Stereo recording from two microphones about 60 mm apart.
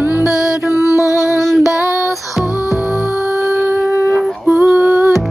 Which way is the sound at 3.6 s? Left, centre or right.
Right.